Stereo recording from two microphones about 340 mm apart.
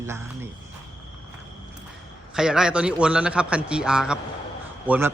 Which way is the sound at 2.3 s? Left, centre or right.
Centre.